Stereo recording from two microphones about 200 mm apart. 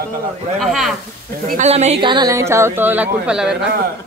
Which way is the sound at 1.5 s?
35° right (ahead or behind).